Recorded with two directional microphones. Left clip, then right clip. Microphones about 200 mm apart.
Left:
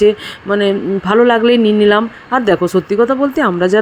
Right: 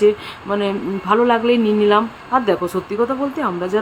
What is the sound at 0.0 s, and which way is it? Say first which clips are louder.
Speech: left 4 dB; 20° left (ahead or behind).